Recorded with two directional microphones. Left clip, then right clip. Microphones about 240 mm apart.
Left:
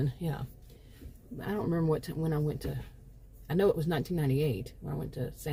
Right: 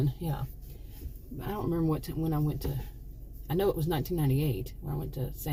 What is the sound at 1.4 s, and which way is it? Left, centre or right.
Speech, left.